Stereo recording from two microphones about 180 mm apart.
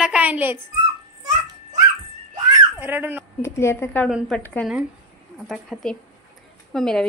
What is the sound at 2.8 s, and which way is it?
Speech, 10° right (ahead or behind).